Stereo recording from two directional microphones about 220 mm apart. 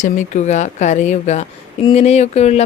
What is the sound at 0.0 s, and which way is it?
Speech, 35° left (ahead or behind).